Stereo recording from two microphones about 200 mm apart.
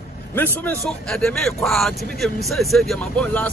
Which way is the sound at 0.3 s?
10° left (ahead or behind).